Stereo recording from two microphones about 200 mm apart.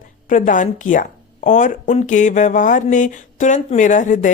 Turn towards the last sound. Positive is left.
turn(degrees=40)  # may be behind; listen again after turning